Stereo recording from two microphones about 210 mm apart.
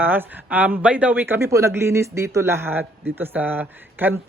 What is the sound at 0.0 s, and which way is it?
Speech, 10° right (ahead or behind).